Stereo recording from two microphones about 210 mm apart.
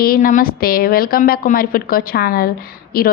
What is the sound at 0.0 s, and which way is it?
A woman's voice, 40° left (ahead or behind).